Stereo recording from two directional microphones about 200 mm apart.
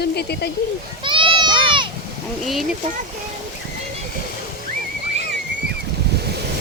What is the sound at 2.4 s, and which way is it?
Speech, centre (ahead or behind).